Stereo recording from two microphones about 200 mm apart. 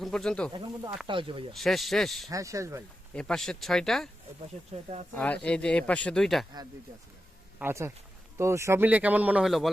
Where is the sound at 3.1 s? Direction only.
5° left (ahead or behind).